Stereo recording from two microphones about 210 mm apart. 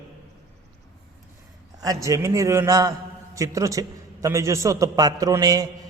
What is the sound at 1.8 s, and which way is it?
A man's voice, 15° right (ahead or behind).